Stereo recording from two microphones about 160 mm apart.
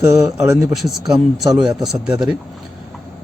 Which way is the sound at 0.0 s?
20° right (ahead or behind).